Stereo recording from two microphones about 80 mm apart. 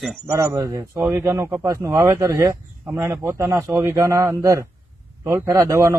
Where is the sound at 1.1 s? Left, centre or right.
Right.